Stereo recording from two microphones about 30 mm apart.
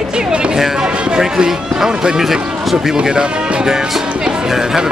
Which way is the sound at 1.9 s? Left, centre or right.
Right.